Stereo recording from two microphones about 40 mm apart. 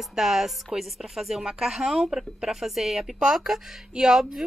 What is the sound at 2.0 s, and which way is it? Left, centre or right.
A woman's voice, centre.